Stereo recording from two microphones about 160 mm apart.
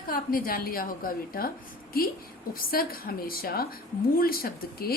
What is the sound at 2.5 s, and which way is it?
A woman's voice, 65° left (ahead or behind).